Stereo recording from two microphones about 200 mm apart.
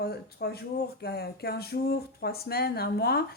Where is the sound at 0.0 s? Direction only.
50° left (ahead or behind).